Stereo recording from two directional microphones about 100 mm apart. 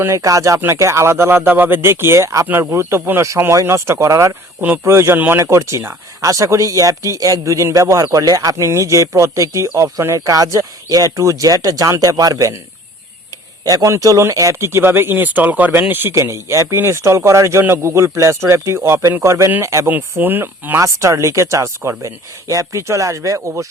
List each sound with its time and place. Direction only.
0.0 s speech: 30° right (ahead or behind)
4.6 s speech: 20° right (ahead or behind); by 12.5 s 35° right (ahead or behind)
13.7 s speech: 40° right (ahead or behind)
19.9 s speech: 20° right (ahead or behind)